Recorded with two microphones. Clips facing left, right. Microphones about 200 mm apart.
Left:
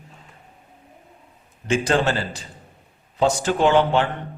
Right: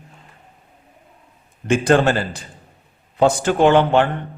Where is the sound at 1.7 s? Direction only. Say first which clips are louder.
Right 5 dB; 55° right (ahead or behind).